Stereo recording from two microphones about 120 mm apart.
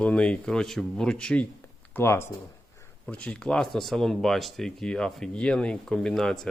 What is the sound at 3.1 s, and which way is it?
Speech, 10° left (ahead or behind).